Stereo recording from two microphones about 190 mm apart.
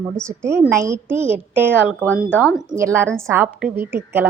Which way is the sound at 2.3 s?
10° left (ahead or behind).